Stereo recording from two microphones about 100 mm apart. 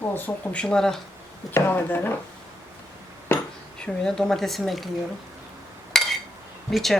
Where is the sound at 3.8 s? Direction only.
5° left (ahead or behind).